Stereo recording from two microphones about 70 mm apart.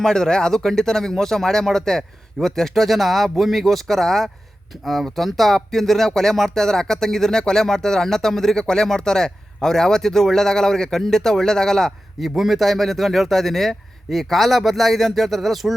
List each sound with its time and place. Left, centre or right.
0.0 s speech: centre